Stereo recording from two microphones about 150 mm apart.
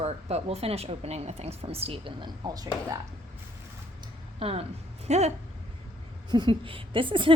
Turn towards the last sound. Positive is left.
turn(degrees=-35)  # may be behind; listen again after turning